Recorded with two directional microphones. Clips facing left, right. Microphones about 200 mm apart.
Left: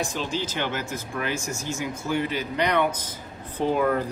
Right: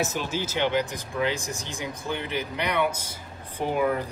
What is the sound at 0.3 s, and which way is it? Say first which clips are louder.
Speech: right 2 dB; 10° right (ahead or behind).